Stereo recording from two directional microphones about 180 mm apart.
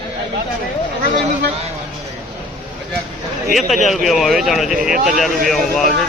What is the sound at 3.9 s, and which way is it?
Speech, centre (ahead or behind).